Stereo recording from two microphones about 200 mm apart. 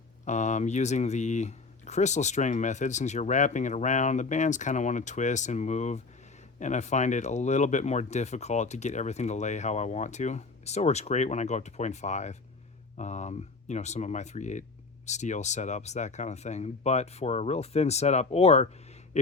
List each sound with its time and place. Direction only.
0.3 s speech: 35° left (ahead or behind)